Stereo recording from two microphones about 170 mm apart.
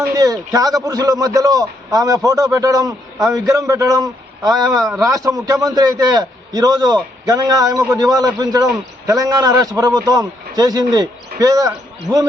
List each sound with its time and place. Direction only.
0.2 s a man's voice: 20° right (ahead or behind)
4.7 s a man's voice: centre (ahead or behind)
5.0 s a man's voice: 20° right (ahead or behind)